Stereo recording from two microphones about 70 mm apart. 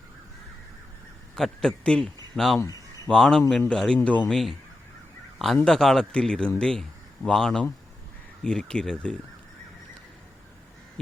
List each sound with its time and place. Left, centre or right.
1.4 s speech: centre
4.3 s speech: centre
5.6 s speech: centre